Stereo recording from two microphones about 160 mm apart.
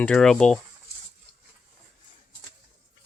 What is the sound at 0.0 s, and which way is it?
Speech, 5° left (ahead or behind).